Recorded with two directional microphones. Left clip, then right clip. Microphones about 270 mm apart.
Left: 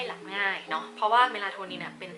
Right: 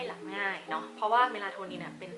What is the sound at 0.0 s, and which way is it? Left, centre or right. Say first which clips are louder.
A woman's voice: left 4 dB; centre.